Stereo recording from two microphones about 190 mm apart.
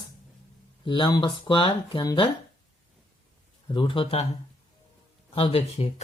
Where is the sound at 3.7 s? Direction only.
25° left (ahead or behind).